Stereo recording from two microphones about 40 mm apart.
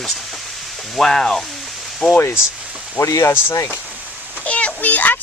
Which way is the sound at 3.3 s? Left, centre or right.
Left.